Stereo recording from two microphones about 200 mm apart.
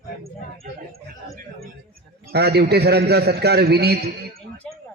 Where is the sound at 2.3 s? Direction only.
55° right (ahead or behind).